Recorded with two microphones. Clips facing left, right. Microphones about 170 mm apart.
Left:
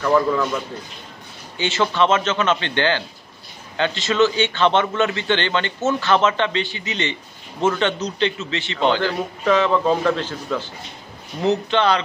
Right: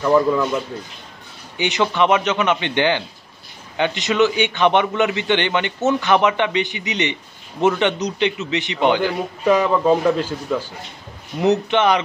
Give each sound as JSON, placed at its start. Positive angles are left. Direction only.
{"t": 0.0, "sound": "a man's voice", "side_deg": -15}
{"t": 1.6, "sound": "a man's voice", "side_deg": -15}